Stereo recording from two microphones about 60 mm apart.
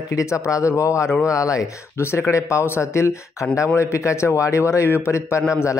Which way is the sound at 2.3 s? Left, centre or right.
Left.